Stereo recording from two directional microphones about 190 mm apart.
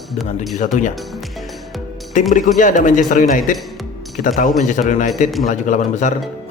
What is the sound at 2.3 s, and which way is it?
A man's voice, 40° left (ahead or behind).